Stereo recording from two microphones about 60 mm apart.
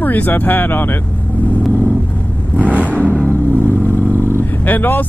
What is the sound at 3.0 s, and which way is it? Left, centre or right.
Vehicle, left.